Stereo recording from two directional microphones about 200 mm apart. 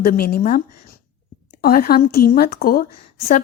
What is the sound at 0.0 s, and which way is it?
Speech, 50° left (ahead or behind).